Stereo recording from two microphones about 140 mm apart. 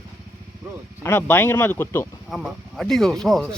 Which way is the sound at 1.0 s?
15° left (ahead or behind).